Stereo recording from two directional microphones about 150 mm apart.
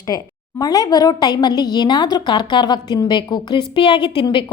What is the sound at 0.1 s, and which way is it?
A woman's voice, 25° left (ahead or behind).